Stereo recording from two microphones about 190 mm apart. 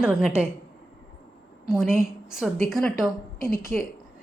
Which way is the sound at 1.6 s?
Centre (ahead or behind).